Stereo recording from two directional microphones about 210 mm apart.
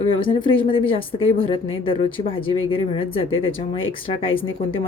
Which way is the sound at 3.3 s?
70° left (ahead or behind).